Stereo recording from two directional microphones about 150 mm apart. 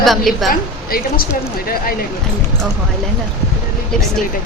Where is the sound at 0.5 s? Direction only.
75° left (ahead or behind).